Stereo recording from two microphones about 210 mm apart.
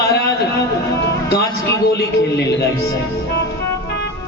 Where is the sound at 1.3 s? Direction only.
50° left (ahead or behind).